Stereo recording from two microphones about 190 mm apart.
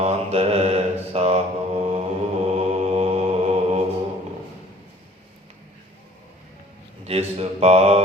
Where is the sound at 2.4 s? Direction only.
35° right (ahead or behind).